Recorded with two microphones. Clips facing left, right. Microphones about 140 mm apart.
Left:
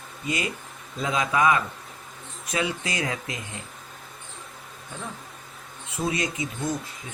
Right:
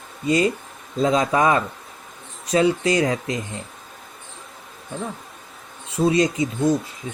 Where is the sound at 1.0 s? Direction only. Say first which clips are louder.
Right 6 dB; 35° right (ahead or behind).